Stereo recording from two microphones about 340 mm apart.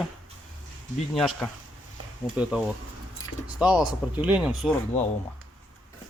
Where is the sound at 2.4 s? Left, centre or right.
Centre.